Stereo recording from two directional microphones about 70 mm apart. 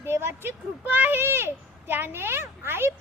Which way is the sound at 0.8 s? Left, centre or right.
Right.